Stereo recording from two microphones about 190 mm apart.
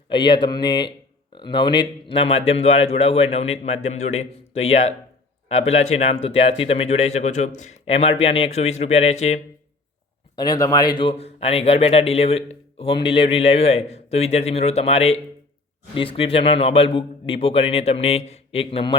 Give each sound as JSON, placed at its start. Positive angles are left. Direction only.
{"t": 0.1, "sound": "a man's voice", "side_deg": 25}
{"t": 10.3, "sound": "a man's voice", "side_deg": 20}